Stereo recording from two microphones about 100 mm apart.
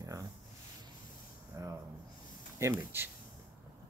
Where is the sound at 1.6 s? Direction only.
35° right (ahead or behind).